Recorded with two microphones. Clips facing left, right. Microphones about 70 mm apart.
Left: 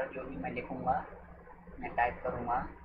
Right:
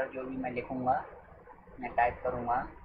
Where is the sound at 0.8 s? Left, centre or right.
Centre.